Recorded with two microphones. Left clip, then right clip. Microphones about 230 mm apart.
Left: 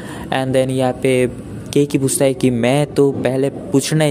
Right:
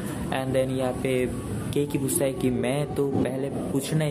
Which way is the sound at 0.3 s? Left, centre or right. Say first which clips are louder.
Left 9 dB; left.